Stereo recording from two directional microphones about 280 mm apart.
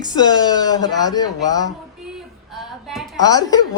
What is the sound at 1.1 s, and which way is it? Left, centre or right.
Speech, centre.